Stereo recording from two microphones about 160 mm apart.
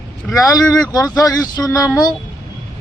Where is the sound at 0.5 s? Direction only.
20° left (ahead or behind).